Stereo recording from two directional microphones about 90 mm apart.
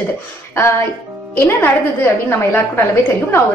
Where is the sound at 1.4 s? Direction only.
25° left (ahead or behind).